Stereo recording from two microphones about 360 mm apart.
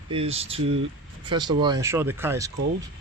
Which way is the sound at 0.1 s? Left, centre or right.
Centre.